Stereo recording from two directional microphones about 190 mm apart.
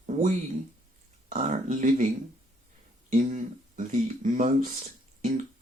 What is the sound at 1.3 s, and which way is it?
Speech, 45° right (ahead or behind).